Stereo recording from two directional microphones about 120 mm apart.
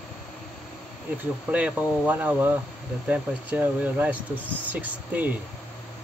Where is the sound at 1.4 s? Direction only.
10° right (ahead or behind).